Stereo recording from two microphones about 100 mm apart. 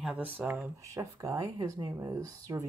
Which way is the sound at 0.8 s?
35° right (ahead or behind).